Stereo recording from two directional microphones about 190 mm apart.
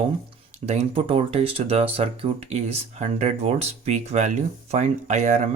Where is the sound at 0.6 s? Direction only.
35° right (ahead or behind).